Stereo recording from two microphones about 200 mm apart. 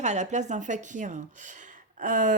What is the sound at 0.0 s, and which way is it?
Speech, 35° right (ahead or behind).